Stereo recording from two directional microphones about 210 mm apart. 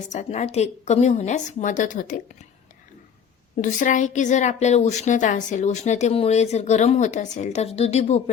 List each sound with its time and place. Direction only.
0.1 s a woman's voice: 35° left (ahead or behind)
3.6 s a woman's voice: 40° left (ahead or behind)